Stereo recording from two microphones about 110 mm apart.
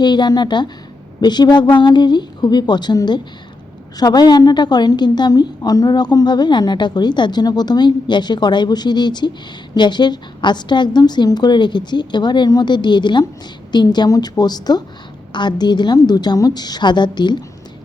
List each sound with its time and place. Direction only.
0.0 s a woman's voice: 40° left (ahead or behind)